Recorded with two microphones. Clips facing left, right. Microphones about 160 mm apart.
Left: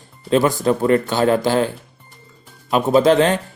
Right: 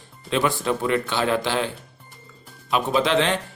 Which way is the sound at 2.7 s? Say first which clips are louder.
Left 7 dB; 45° left (ahead or behind).